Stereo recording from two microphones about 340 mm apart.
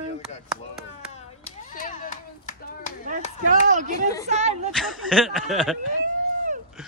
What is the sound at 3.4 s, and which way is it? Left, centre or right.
Speech, right.